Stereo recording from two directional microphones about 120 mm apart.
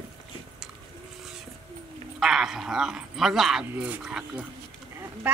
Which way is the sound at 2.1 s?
5° right (ahead or behind).